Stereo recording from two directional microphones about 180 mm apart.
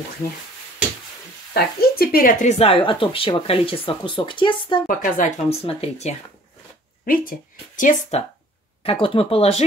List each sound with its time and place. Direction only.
1.5 s speech: 60° left (ahead or behind)
2.6 s speech: 30° left (ahead or behind)
4.8 s speech: 50° left (ahead or behind)
7.1 s speech: 50° left (ahead or behind)
8.8 s speech: 30° left (ahead or behind)